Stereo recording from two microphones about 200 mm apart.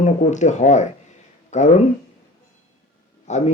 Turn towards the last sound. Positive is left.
turn(degrees=35)  # may be behind; listen again after turning